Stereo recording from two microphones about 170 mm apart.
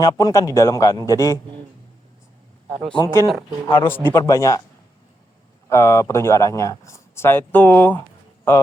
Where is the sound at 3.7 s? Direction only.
15° left (ahead or behind).